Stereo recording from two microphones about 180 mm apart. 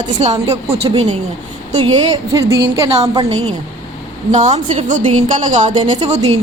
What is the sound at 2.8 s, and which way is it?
A woman's voice, 30° right (ahead or behind).